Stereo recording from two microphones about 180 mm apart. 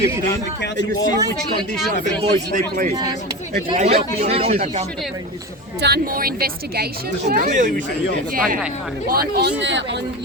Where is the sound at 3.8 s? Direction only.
35° right (ahead or behind).